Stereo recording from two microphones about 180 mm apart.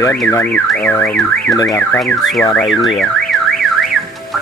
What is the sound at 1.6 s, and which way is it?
Car alarm, 20° left (ahead or behind).